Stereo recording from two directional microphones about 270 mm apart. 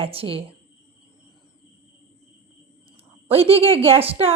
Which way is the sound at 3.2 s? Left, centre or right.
Right.